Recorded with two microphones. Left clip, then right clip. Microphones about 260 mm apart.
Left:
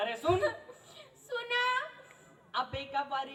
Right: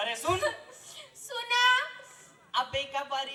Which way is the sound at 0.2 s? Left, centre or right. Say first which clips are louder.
Left 1 dB; right.